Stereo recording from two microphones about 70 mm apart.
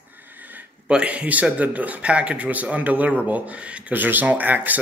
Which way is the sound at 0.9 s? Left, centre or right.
Centre.